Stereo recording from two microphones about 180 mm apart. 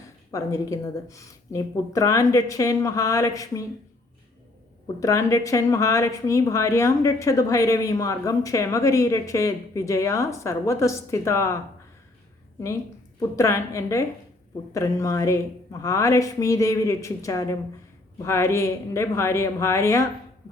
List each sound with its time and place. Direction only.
0.3 s a woman's voice: 20° left (ahead or behind)
4.9 s a woman's voice: 15° left (ahead or behind)
12.5 s a woman's voice: 15° left (ahead or behind)